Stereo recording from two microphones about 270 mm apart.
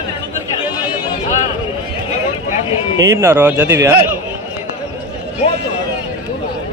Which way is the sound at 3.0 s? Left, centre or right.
Centre.